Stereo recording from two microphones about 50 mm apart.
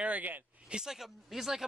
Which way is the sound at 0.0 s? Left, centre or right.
Right.